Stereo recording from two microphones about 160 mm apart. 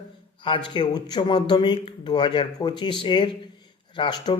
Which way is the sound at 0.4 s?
30° left (ahead or behind).